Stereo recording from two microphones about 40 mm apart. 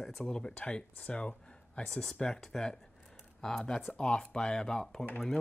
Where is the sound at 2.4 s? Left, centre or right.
Centre.